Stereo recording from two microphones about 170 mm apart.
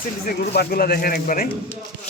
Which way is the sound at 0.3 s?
65° left (ahead or behind).